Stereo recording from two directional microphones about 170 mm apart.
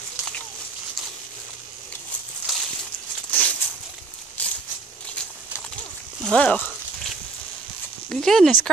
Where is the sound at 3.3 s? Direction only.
10° left (ahead or behind).